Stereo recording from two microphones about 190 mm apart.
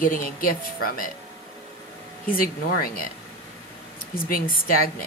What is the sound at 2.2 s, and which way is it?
Speech, 50° left (ahead or behind).